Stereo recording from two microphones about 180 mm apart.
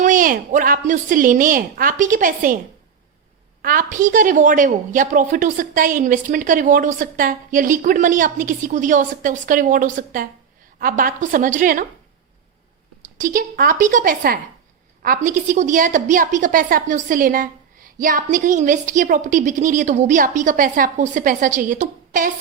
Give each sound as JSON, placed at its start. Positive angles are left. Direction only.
{"t": 0.0, "sound": "a woman's voice", "side_deg": -50}
{"t": 3.6, "sound": "a woman's voice", "side_deg": -50}
{"t": 13.0, "sound": "a woman's voice", "side_deg": -45}